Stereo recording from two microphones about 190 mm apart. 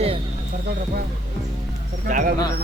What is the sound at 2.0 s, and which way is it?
Speech, 45° right (ahead or behind).